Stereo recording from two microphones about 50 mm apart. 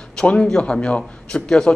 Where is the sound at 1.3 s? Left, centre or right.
Centre.